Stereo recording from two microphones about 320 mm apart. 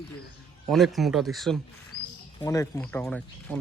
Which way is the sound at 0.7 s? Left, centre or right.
Centre.